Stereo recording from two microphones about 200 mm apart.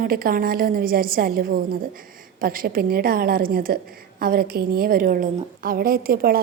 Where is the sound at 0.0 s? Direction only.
45° right (ahead or behind).